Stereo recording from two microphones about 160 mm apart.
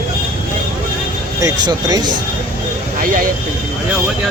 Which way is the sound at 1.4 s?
25° right (ahead or behind).